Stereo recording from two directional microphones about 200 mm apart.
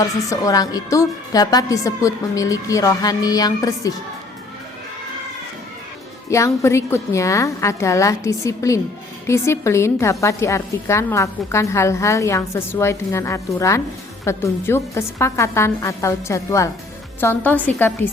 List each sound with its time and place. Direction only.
0.0 s a woman's voice: 15° left (ahead or behind)
6.3 s a woman's voice: 15° left (ahead or behind)